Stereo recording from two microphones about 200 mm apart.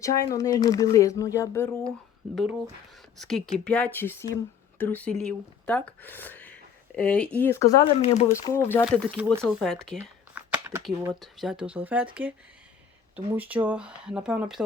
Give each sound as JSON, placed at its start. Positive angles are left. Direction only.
{"t": 0.0, "sound": "speech", "side_deg": 15}
{"t": 2.3, "sound": "speech", "side_deg": 0}
{"t": 7.9, "sound": "speech", "side_deg": 35}
{"t": 8.4, "sound": "speech", "side_deg": 10}
{"t": 8.8, "sound": "speech", "side_deg": -5}
{"t": 10.0, "sound": "a sound", "side_deg": -10}
{"t": 11.1, "sound": "speech", "side_deg": 0}
{"t": 13.3, "sound": "speech", "side_deg": -5}